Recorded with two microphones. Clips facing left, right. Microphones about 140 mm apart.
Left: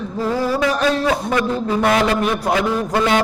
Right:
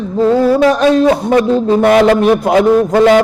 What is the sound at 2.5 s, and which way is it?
Speech, 50° right (ahead or behind).